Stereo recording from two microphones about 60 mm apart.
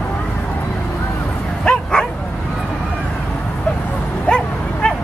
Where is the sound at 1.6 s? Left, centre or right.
Centre.